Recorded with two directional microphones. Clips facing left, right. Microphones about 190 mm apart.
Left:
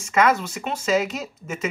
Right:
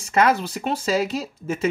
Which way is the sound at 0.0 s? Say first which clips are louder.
Right 1 dB; 35° right (ahead or behind).